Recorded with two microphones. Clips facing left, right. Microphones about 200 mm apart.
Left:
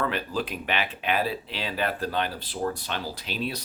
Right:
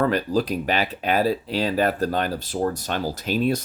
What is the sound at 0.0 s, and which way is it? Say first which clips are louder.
Speech: right 7 dB; 40° right (ahead or behind).